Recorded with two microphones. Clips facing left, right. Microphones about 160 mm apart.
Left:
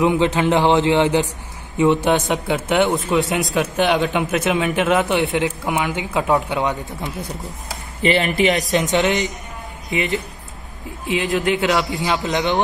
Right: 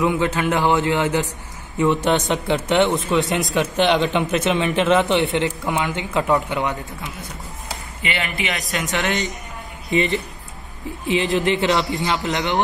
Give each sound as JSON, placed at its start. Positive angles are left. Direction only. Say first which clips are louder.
{"t": 0.0, "sound": "a man's voice", "louder": "left 3 dB", "side_deg": 20}
{"t": 5.7, "sound": "a man's voice", "louder": "left 1 dB", "side_deg": 20}
{"t": 8.0, "sound": "speech", "louder": "left 10 dB", "side_deg": 35}
{"t": 8.9, "sound": "a man's voice", "louder": "left 3 dB", "side_deg": 20}
{"t": 9.8, "sound": "speech", "louder": "right 2 dB", "side_deg": 0}
{"t": 12.2, "sound": "a man's voice", "louder": "left 3 dB", "side_deg": 20}